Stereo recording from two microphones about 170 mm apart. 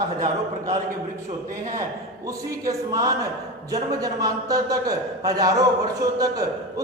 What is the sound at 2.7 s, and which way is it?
A man's voice, 20° right (ahead or behind).